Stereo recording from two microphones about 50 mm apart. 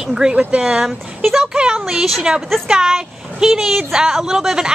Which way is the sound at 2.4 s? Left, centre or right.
Centre.